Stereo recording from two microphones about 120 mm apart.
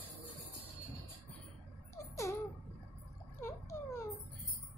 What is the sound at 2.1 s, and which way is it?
Laughter, 25° left (ahead or behind).